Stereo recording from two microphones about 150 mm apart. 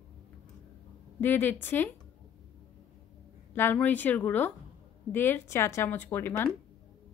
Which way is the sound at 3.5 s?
15° left (ahead or behind).